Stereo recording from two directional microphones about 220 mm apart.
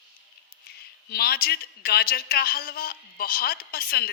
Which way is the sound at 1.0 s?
45° left (ahead or behind).